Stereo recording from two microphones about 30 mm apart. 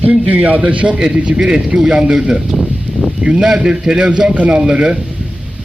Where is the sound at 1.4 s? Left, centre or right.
Right.